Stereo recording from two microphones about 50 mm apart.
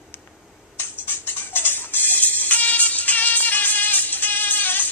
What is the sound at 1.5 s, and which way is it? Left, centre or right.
Music, left.